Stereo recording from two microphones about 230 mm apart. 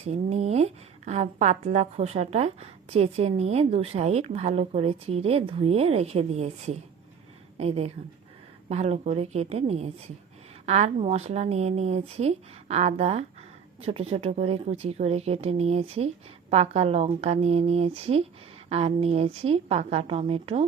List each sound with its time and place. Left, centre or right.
0.0 s a woman's voice: right